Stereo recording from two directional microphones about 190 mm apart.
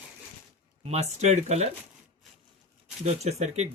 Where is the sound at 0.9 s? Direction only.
35° right (ahead or behind).